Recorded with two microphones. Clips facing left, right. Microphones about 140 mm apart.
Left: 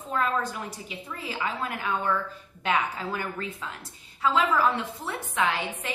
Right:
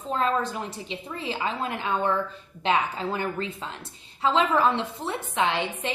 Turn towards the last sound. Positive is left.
turn(degrees=-25)  # may be behind; listen again after turning